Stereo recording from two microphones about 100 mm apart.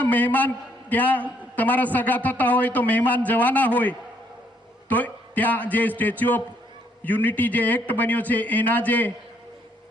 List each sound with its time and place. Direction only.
0.0 s a man's voice: 15° left (ahead or behind)